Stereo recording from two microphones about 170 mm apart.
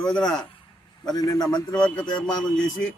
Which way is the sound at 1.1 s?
25° left (ahead or behind).